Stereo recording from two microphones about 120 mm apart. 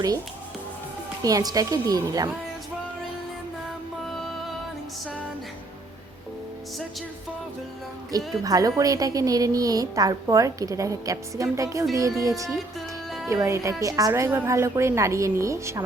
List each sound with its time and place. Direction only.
1.2 s speech: 30° right (ahead or behind)
8.1 s speech: 30° right (ahead or behind)